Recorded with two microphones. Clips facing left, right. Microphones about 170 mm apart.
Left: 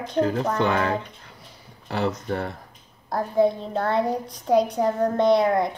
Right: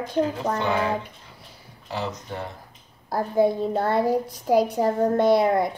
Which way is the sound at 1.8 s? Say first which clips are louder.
Left 5 dB; 60° left (ahead or behind).